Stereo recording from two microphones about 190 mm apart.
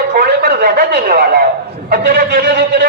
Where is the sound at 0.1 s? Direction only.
50° right (ahead or behind).